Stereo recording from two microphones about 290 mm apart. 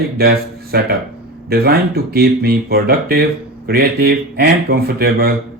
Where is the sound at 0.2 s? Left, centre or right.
Right.